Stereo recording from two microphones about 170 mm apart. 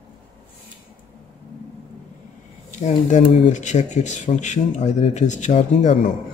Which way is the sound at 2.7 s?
45° left (ahead or behind).